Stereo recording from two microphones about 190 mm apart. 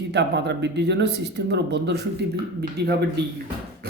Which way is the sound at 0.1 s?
65° right (ahead or behind).